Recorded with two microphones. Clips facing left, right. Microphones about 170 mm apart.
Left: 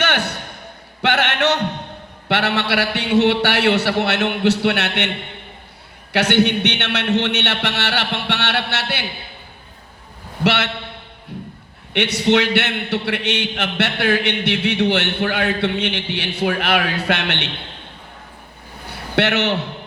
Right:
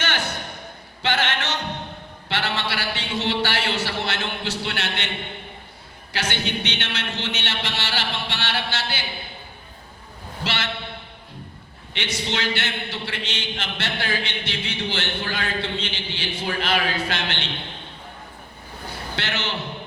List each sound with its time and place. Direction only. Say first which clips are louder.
0.0 s a sound: left 6 dB; 65° left (ahead or behind)
1.0 s music: left 7 dB; 65° left (ahead or behind)
2.2 s a man's voice: left 7 dB; 65° left (ahead or behind)
6.1 s a man's voice: left 11 dB; 65° left (ahead or behind)
10.4 s a man's voice: left 10 dB; 65° left (ahead or behind)
11.9 s a man's voice: left 11 dB; 65° left (ahead or behind)
18.9 s a sound: left 11 dB; 70° left (ahead or behind)